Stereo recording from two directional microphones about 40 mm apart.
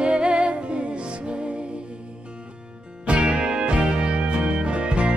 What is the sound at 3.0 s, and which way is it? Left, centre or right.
Music, right.